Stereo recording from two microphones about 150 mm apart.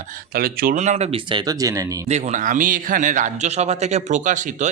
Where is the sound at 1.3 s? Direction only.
25° right (ahead or behind).